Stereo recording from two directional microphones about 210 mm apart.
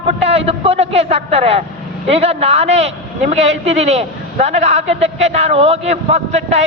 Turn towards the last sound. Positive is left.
turn(degrees=-30)  # may be behind; listen again after turning